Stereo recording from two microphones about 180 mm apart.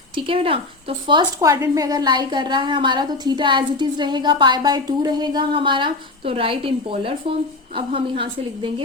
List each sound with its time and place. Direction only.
0.2 s a woman's voice: 30° right (ahead or behind)